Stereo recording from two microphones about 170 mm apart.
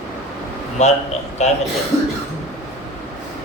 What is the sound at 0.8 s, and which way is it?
Speech, 40° left (ahead or behind).